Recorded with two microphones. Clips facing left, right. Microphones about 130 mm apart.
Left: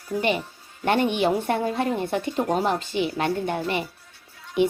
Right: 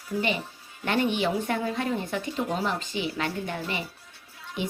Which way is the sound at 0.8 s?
55° left (ahead or behind).